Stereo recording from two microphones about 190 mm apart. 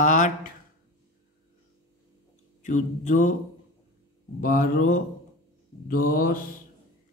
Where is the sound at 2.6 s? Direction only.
40° left (ahead or behind).